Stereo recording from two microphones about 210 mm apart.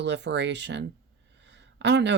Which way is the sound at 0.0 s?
55° right (ahead or behind).